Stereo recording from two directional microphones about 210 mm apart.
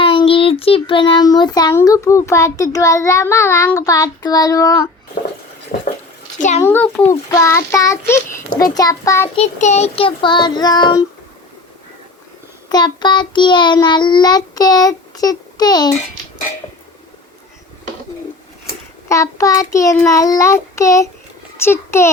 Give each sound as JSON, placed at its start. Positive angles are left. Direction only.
{"t": 0.0, "sound": "child singing", "side_deg": 25}
{"t": 5.7, "sound": "a sound", "side_deg": 40}
{"t": 6.6, "sound": "child singing", "side_deg": 10}
{"t": 9.3, "sound": "child singing", "side_deg": 30}
{"t": 12.6, "sound": "child singing", "side_deg": 20}
{"t": 19.0, "sound": "child singing", "side_deg": 15}